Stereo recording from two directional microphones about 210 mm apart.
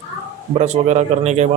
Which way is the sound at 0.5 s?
35° right (ahead or behind).